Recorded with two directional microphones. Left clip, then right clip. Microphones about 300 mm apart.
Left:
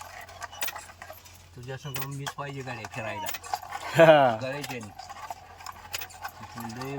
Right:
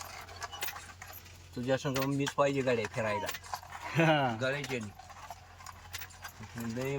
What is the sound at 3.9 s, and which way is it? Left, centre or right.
Speech, centre.